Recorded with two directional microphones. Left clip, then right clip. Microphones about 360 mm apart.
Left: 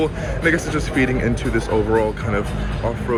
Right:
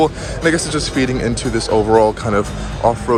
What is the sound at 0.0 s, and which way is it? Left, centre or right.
A man's voice, centre.